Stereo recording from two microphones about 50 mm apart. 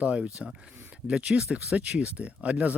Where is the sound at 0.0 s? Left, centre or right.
Right.